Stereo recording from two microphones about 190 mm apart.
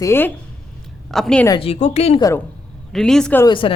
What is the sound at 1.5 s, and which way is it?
Speech, 30° left (ahead or behind).